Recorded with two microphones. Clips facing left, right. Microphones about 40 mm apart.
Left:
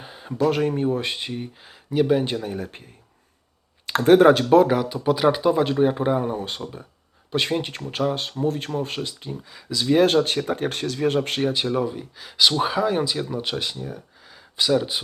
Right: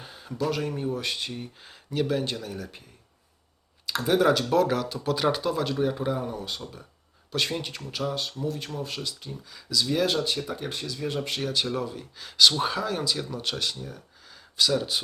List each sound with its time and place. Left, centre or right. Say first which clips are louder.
0.0 s speech: left 7 dB; centre
3.8 s speech: left 8 dB; left
9.3 s speech: even; centre; by 10.7 s left
10.7 s speech: left 8 dB; left
11.3 s speech: left 6 dB; left